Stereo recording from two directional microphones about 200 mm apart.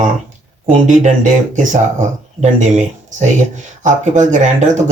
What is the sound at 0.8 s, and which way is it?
Speech, 40° right (ahead or behind).